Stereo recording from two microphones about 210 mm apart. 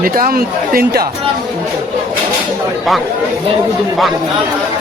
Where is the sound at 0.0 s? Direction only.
40° right (ahead or behind).